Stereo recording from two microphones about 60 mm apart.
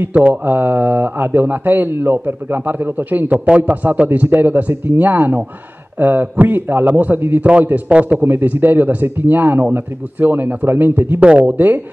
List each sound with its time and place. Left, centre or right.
0.1 s speech: right
3.3 s a man's voice: centre
8.3 s a man's voice: right
11.2 s a man's voice: centre